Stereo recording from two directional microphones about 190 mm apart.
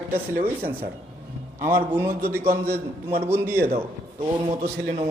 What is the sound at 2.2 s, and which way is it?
Speech, 15° right (ahead or behind).